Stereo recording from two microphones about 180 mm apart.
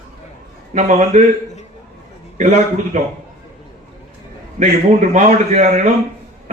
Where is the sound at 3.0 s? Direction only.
45° right (ahead or behind).